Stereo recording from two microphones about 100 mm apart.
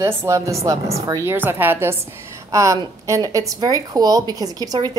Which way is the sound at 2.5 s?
35° right (ahead or behind).